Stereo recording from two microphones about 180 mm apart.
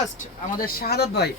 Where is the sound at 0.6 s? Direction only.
55° left (ahead or behind).